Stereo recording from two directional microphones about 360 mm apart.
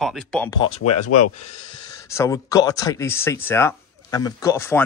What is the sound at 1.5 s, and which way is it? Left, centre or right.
A man's voice, centre.